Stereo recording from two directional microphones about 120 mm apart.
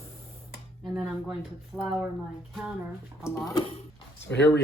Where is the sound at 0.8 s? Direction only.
Centre (ahead or behind).